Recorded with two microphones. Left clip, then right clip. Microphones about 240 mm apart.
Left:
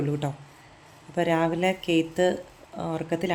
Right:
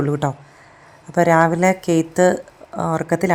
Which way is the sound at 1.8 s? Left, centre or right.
Right.